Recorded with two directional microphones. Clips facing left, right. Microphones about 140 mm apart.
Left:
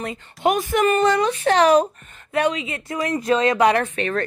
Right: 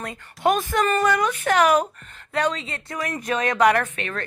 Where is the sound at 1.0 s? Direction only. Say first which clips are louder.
Left 3 dB; 30° left (ahead or behind).